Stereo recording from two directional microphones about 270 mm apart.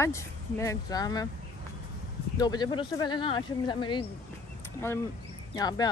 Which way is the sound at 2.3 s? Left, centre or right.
Centre.